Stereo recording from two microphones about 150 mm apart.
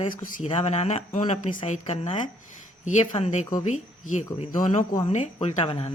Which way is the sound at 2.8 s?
55° left (ahead or behind).